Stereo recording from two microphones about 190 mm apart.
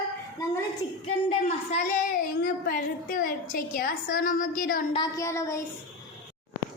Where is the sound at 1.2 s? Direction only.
40° left (ahead or behind).